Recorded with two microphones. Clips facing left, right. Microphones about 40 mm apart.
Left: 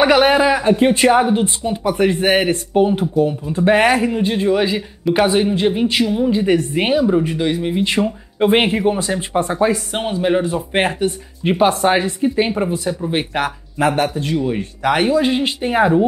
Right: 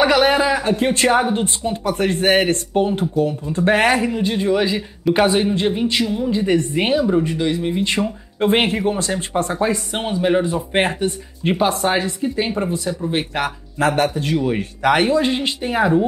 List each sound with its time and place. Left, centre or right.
0.0 s speech: centre
11.8 s speech: left; by 15.5 s centre
15.6 s speech: centre